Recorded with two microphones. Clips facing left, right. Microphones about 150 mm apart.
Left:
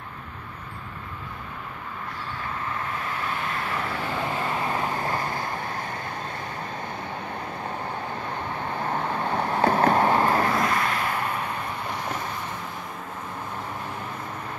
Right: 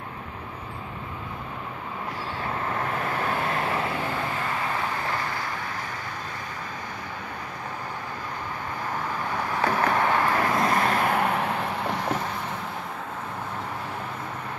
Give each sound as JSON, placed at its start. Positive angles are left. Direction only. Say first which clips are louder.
{"t": 2.7, "sound": "vehicle", "louder": "right 3 dB", "side_deg": -40}
{"t": 4.6, "sound": "vehicle", "louder": "left 2 dB", "side_deg": 25}
{"t": 8.9, "sound": "vehicle", "louder": "left 3 dB", "side_deg": 25}
{"t": 10.6, "sound": "vehicle", "louder": "right 2 dB", "side_deg": -35}